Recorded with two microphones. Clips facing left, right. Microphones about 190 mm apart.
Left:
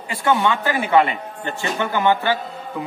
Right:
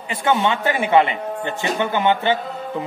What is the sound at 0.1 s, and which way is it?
A man's voice, 20° right (ahead or behind).